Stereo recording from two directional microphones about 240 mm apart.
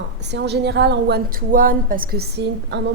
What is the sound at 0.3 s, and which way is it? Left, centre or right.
A woman's voice, right.